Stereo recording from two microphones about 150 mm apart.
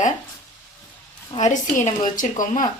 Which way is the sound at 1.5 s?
55° left (ahead or behind).